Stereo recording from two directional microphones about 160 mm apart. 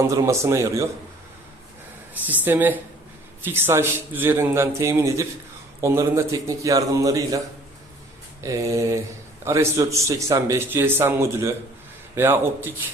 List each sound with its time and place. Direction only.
0.0 s a man's voice: 20° right (ahead or behind)
2.2 s a man's voice: 10° right (ahead or behind)